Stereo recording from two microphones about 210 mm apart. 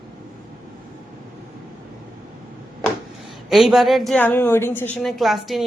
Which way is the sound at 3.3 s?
Centre (ahead or behind).